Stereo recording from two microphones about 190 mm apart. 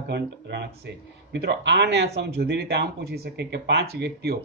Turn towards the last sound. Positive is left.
turn(degrees=-60)  # may be behind; listen again after turning